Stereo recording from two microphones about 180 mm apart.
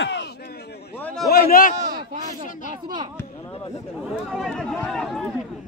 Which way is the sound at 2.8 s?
25° right (ahead or behind).